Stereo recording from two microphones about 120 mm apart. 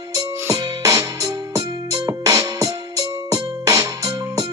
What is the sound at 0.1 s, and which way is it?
Music, 30° right (ahead or behind).